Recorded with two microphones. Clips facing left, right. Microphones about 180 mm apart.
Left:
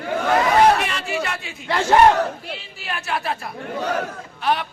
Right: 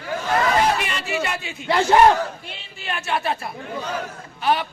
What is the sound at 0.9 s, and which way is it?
Speech, centre (ahead or behind).